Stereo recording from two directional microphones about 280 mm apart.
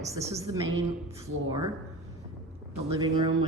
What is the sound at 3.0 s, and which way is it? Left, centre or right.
Speech, centre.